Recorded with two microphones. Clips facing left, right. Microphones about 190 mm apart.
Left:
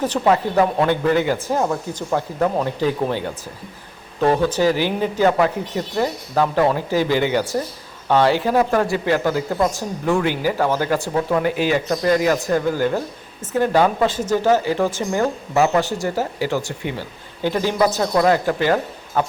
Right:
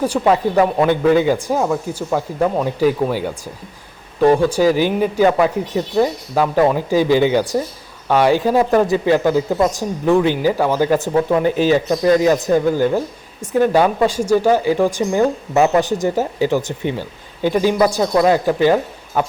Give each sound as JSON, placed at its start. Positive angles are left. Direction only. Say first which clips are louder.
{"t": 0.0, "sound": "speech", "louder": "right 2 dB", "side_deg": -10}